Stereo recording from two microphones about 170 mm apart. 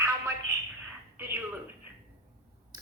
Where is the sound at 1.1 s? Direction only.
10° right (ahead or behind).